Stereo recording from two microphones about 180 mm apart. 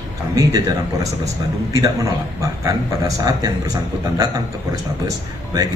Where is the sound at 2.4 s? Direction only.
20° right (ahead or behind).